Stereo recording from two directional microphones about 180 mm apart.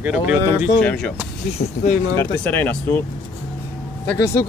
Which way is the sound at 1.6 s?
70° left (ahead or behind).